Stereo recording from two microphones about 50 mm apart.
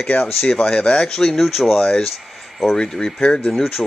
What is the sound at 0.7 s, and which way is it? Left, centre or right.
Speech, centre.